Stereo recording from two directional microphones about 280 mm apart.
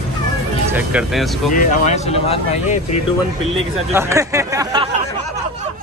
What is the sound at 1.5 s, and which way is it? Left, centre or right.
Speech, left.